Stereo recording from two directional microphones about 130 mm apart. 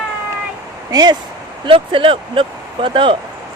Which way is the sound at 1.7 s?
40° right (ahead or behind).